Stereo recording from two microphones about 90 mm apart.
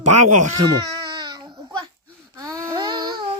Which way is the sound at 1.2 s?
50° right (ahead or behind).